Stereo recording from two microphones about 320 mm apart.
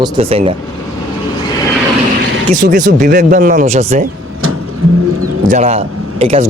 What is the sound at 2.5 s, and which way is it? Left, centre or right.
Speech, right.